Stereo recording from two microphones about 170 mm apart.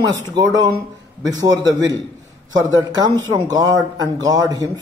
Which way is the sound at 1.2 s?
25° right (ahead or behind).